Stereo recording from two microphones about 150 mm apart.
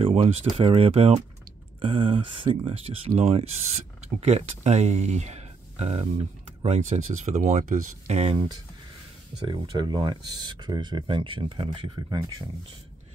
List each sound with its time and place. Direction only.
0.0 s speech: 40° right (ahead or behind)
9.5 s speech: 30° right (ahead or behind)